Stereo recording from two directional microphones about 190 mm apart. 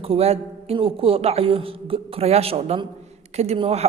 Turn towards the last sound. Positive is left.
turn(degrees=-30)  # may be behind; listen again after turning